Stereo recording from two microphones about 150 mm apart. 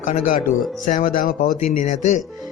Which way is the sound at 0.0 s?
65° left (ahead or behind).